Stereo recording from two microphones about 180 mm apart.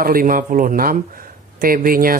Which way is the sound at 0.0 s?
55° right (ahead or behind).